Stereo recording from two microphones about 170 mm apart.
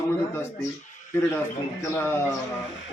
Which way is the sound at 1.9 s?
15° left (ahead or behind).